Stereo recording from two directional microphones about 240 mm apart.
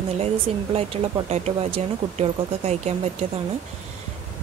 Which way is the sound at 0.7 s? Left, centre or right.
Right.